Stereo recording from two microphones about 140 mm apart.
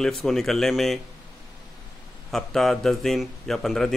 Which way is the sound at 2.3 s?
5° left (ahead or behind).